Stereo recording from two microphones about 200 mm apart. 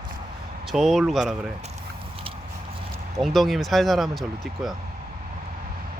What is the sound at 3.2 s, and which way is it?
Speech, centre (ahead or behind).